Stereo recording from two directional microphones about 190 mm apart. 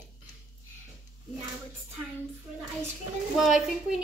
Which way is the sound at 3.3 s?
Centre (ahead or behind).